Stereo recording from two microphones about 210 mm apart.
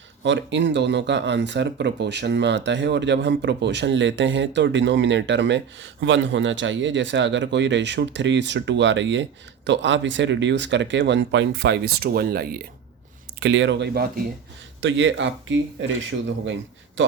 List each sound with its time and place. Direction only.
0.2 s speech: 55° right (ahead or behind)
13.4 s a man's voice: 60° right (ahead or behind)